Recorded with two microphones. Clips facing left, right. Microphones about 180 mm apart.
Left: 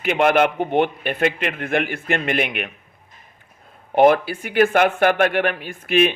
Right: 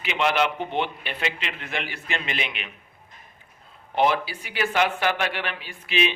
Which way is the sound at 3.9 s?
50° left (ahead or behind).